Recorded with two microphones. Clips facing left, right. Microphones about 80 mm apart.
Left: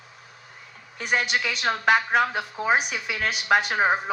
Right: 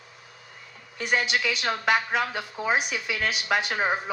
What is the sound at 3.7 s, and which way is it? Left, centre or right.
Speech, centre.